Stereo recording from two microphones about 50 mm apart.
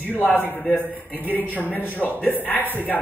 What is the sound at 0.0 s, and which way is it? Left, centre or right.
A man's voice, left.